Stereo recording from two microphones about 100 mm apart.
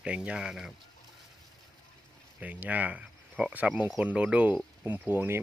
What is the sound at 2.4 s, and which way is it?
Speech, 15° right (ahead or behind).